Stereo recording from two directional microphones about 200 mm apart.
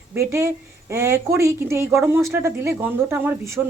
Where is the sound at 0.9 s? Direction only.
15° right (ahead or behind).